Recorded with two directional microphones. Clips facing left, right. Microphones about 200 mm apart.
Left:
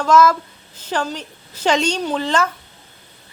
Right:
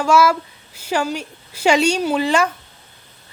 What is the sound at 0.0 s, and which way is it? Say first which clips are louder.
A woman's voice: left 1 dB; 10° right (ahead or behind).